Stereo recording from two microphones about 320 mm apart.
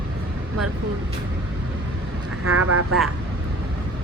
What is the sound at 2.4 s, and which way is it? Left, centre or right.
Speech, right.